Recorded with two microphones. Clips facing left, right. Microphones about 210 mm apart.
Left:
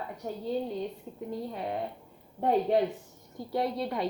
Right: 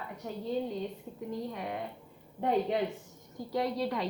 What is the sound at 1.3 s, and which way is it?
A woman's voice, 30° left (ahead or behind).